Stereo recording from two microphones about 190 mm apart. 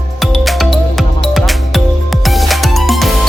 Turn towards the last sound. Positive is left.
turn(degrees=0)  # may be behind; listen again after turning